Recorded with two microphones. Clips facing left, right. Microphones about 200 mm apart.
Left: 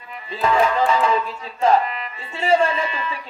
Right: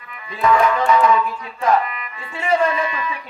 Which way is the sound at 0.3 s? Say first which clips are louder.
Right 2 dB; 30° left (ahead or behind).